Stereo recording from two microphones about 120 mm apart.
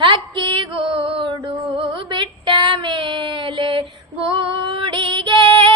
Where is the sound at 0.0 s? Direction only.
40° right (ahead or behind).